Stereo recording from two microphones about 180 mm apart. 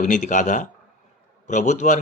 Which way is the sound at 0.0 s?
45° left (ahead or behind).